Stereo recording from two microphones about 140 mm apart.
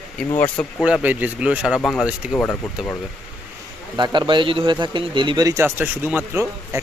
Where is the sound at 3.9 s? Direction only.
35° right (ahead or behind).